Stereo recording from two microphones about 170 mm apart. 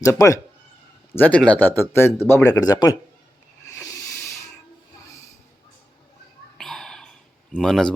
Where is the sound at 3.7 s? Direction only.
20° left (ahead or behind).